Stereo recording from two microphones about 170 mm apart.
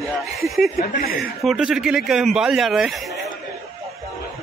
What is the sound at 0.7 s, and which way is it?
Speech, 60° left (ahead or behind).